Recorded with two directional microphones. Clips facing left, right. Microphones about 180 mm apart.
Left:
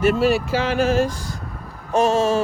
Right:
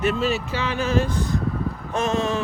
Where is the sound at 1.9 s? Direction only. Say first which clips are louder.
Left 6 dB; 40° left (ahead or behind).